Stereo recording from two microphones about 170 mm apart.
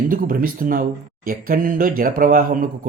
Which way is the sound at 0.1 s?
60° right (ahead or behind).